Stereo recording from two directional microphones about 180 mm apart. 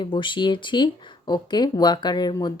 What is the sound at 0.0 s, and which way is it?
Speech, 25° left (ahead or behind).